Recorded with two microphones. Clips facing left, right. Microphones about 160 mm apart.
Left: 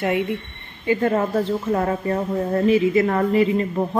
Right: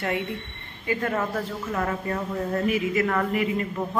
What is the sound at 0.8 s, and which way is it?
Speech, 30° left (ahead or behind).